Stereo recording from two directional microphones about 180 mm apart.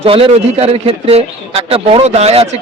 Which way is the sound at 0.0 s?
30° right (ahead or behind).